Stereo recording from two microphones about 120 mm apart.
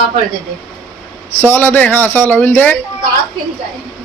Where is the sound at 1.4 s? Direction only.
15° left (ahead or behind).